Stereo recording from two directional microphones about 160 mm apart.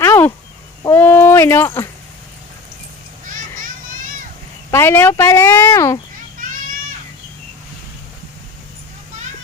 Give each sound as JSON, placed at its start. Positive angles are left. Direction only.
{"t": 0.0, "sound": "a sound", "side_deg": 15}
{"t": 3.2, "sound": "children playing", "side_deg": -55}
{"t": 4.7, "sound": "speech", "side_deg": 15}
{"t": 6.4, "sound": "children playing", "side_deg": -60}